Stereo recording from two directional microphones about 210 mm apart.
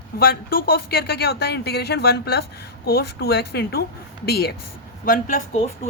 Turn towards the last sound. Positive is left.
turn(degrees=40)  # may be behind; listen again after turning